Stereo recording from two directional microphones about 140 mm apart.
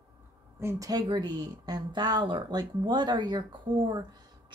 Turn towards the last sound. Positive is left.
turn(degrees=-30)  # may be behind; listen again after turning